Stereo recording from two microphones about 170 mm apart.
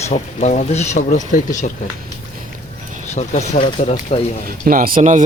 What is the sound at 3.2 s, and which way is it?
Speech, 45° left (ahead or behind).